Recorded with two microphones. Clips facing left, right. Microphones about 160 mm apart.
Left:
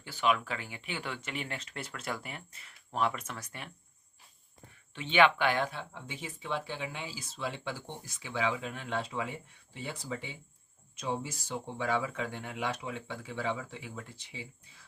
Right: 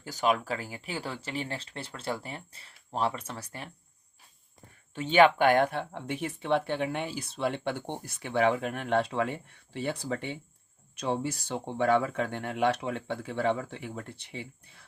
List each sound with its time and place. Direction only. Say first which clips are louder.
0.0 s speech: right 2 dB; 40° right (ahead or behind)
4.9 s speech: right 5 dB; 40° right (ahead or behind); by 14.8 s 60° right (ahead or behind)